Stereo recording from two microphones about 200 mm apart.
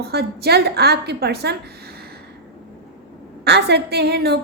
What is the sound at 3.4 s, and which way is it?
Speech, 55° right (ahead or behind).